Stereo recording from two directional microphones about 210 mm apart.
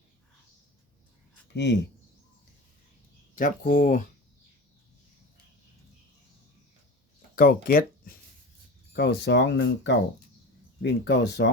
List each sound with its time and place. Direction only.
1.5 s speech: 55° left (ahead or behind)
3.3 s speech: 40° left (ahead or behind)
7.3 s speech: 45° left (ahead or behind)